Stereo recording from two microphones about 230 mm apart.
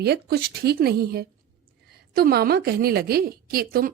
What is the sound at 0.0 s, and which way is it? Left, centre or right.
A woman's voice, right.